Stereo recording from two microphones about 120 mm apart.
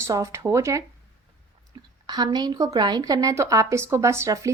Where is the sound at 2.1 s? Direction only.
35° right (ahead or behind).